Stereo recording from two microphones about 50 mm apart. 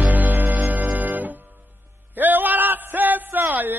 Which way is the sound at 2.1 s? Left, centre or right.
Right.